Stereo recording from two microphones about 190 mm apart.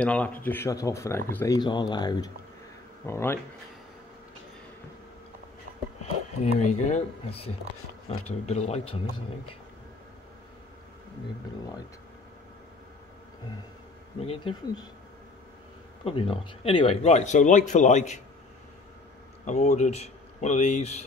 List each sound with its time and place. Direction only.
0.0 s speech: 5° left (ahead or behind)
6.4 s speech: 35° left (ahead or behind)
14.2 s speech: 30° left (ahead or behind)
16.0 s speech: 30° left (ahead or behind)
19.4 s speech: 35° left (ahead or behind)